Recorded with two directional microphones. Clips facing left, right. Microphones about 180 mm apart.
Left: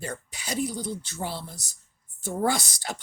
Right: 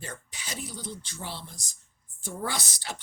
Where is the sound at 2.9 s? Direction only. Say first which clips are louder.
Left 4 dB; 40° left (ahead or behind).